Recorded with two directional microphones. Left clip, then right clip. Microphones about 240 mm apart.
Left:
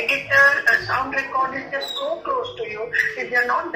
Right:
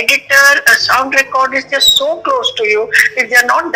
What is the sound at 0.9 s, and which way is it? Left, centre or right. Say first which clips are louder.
A man's voice: right 12 dB; right.